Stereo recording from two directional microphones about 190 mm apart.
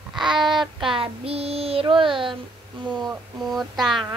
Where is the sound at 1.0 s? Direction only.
30° right (ahead or behind).